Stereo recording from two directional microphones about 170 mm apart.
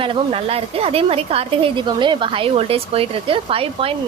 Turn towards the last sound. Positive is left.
turn(degrees=-35)  # may be behind; listen again after turning